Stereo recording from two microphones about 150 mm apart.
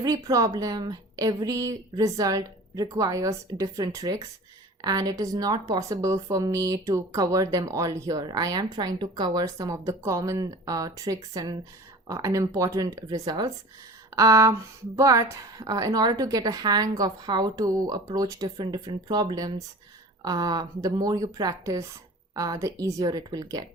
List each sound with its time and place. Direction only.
0.0 s speech: 25° right (ahead or behind)